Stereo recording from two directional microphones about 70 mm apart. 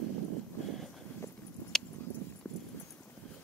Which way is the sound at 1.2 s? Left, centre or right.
Left.